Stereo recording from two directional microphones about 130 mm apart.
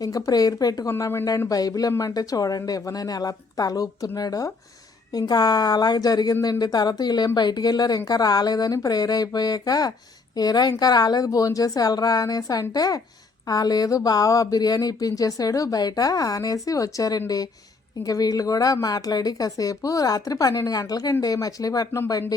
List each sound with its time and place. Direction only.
0.0 s speech: 30° left (ahead or behind)